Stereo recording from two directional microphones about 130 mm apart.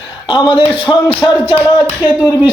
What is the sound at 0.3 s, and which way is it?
A man's voice, 40° left (ahead or behind).